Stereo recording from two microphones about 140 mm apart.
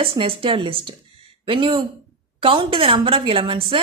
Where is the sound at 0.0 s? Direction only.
40° right (ahead or behind).